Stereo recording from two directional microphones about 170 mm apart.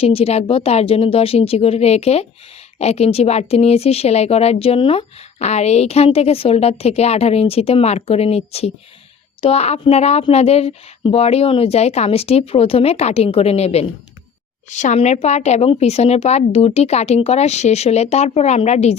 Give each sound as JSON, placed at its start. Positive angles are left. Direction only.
{"t": 0.0, "sound": "speech", "side_deg": 35}